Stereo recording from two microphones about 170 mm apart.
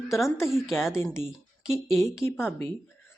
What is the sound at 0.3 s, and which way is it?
Speech, 15° left (ahead or behind).